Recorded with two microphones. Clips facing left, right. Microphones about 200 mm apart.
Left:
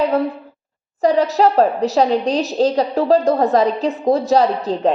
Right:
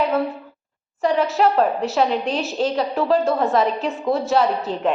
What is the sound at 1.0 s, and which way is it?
A woman's voice, 40° left (ahead or behind).